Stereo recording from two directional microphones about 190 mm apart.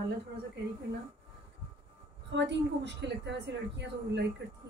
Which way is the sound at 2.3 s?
65° right (ahead or behind).